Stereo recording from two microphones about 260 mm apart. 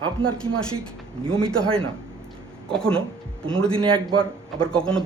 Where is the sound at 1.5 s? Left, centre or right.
Centre.